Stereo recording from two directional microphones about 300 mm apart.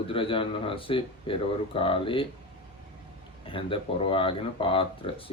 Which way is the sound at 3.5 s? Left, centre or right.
Centre.